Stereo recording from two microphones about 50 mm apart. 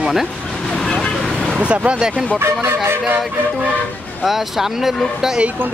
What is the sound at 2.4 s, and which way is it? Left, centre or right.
Speech, right.